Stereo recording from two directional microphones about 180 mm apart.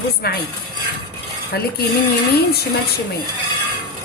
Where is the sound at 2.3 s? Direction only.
60° left (ahead or behind).